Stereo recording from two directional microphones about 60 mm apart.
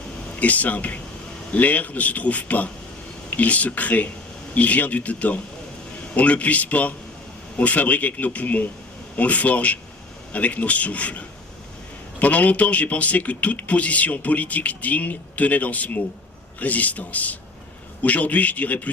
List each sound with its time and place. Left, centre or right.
0.3 s speech: left
12.2 s speech: left